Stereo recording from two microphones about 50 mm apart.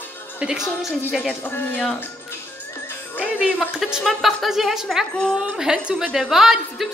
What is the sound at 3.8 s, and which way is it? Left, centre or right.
A woman's voice, centre.